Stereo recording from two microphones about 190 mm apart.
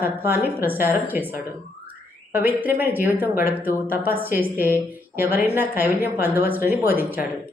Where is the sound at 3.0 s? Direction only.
50° left (ahead or behind).